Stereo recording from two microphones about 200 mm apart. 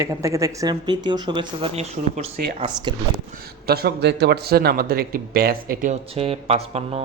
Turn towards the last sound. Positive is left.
turn(degrees=-30)  # may be behind; listen again after turning